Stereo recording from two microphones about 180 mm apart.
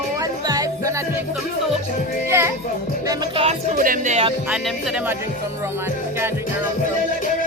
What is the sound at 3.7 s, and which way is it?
Speech, 50° right (ahead or behind).